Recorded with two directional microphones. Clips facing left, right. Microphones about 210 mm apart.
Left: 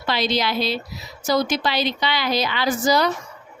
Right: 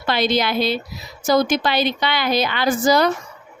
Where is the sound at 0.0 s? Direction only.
50° right (ahead or behind).